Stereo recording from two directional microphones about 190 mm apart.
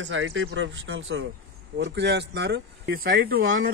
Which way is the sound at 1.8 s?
65° right (ahead or behind).